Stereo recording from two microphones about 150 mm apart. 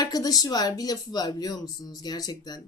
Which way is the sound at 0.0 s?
25° left (ahead or behind).